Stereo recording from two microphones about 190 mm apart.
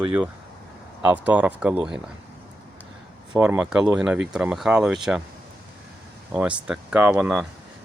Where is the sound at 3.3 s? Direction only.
10° right (ahead or behind).